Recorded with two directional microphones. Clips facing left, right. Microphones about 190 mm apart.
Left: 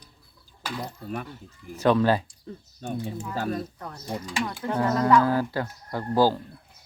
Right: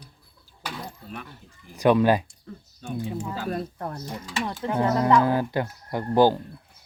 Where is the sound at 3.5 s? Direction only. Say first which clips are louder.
Right 2 dB; 50° right (ahead or behind).